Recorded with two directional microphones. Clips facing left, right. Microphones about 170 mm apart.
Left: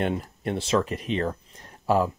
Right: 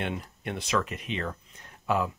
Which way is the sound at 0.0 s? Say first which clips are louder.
Left 6 dB; 40° left (ahead or behind).